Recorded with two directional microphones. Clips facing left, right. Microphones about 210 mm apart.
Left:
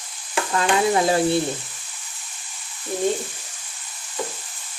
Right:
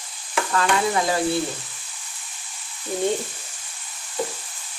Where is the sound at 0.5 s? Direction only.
25° left (ahead or behind).